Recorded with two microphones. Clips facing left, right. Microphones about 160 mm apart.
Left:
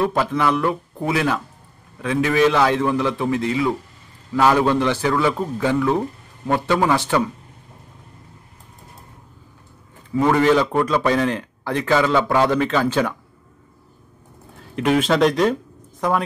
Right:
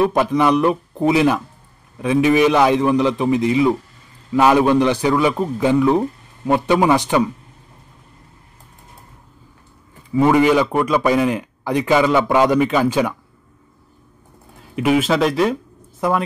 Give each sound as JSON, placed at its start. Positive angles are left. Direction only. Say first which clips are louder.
{"t": 0.0, "sound": "a man's voice", "louder": "right 4 dB", "side_deg": -15}
{"t": 10.1, "sound": "a man's voice", "louder": "right 2 dB", "side_deg": -10}
{"t": 14.8, "sound": "a man's voice", "louder": "right 1 dB", "side_deg": -5}